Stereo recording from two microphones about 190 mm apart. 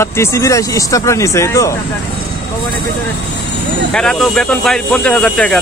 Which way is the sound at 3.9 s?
Centre (ahead or behind).